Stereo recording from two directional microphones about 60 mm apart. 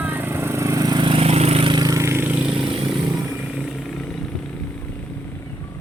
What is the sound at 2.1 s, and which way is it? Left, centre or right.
Vehicle, right.